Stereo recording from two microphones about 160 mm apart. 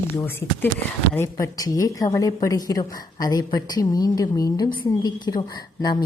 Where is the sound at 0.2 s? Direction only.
15° left (ahead or behind).